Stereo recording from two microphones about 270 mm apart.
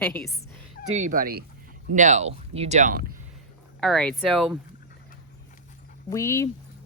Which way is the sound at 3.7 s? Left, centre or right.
Centre.